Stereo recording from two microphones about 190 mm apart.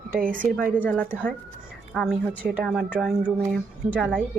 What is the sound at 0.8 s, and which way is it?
A woman's voice, 5° left (ahead or behind).